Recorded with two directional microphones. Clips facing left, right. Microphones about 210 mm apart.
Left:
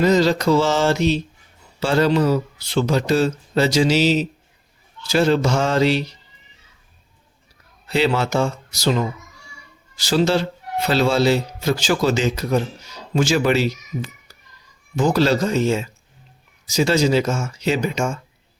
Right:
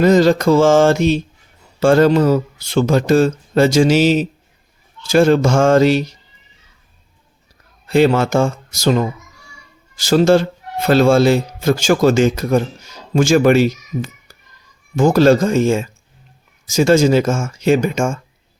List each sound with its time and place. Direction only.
0.0 s speech: 50° right (ahead or behind)
7.9 s speech: 50° right (ahead or behind)